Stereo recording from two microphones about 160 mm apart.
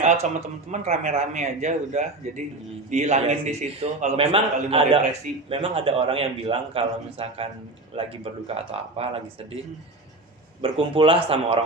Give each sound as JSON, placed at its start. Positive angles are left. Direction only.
{"t": 0.0, "sound": "a sound", "side_deg": -40}
{"t": 0.7, "sound": "a man's voice", "side_deg": -45}
{"t": 10.6, "sound": "a man's voice", "side_deg": -35}